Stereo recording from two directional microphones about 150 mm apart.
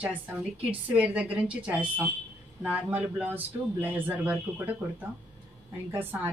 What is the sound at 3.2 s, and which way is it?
A woman's voice, 10° right (ahead or behind).